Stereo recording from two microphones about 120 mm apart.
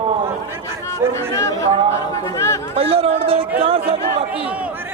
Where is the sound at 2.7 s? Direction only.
55° right (ahead or behind).